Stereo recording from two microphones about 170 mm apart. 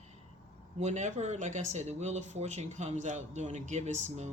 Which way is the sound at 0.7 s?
45° right (ahead or behind).